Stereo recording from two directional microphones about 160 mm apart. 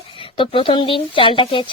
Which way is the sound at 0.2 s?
35° left (ahead or behind).